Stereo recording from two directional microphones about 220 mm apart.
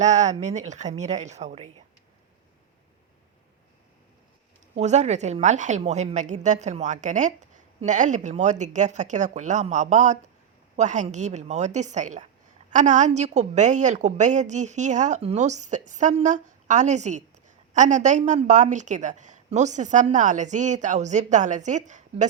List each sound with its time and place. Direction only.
0.0 s a woman's voice: 35° right (ahead or behind)
4.7 s a woman's voice: 30° right (ahead or behind)